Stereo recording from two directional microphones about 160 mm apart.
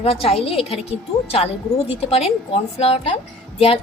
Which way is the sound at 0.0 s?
40° left (ahead or behind).